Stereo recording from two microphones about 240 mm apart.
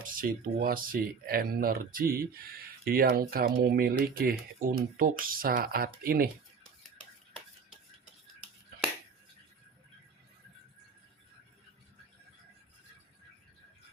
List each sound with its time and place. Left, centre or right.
0.0 s speech: right